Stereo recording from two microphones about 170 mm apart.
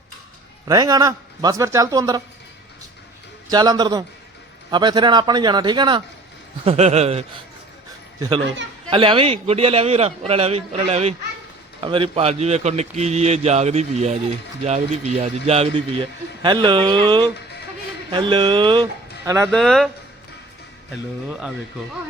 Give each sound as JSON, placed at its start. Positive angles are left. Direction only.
{"t": 0.7, "sound": "a man's voice", "side_deg": -20}
{"t": 3.5, "sound": "a man's voice", "side_deg": -25}
{"t": 6.7, "sound": "speech", "side_deg": -40}
{"t": 8.9, "sound": "a man's voice", "side_deg": -30}
{"t": 19.5, "sound": "speech", "side_deg": 0}
{"t": 20.9, "sound": "speech", "side_deg": -5}